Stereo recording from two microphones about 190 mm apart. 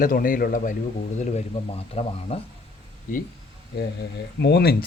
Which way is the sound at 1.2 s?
35° left (ahead or behind).